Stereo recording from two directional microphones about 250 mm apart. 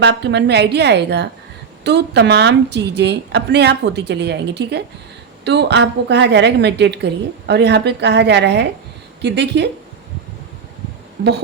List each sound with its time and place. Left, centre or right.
0.0 s a woman's voice: right
11.2 s a woman's voice: right